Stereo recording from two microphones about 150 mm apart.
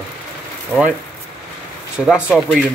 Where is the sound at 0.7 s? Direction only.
5° left (ahead or behind).